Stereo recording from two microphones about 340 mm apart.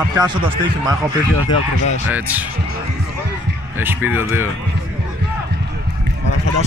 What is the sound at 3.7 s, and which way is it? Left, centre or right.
Speech, centre.